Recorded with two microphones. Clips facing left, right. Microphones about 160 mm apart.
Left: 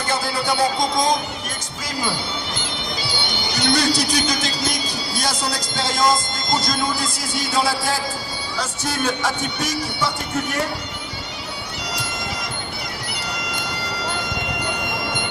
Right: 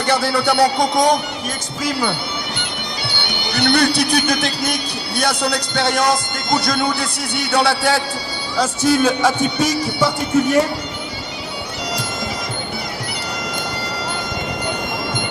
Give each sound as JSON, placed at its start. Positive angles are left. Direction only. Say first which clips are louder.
{"t": 0.1, "sound": "speech", "louder": "right 6 dB", "side_deg": -75}
{"t": 8.9, "sound": "a man's voice", "louder": "right 7 dB", "side_deg": 0}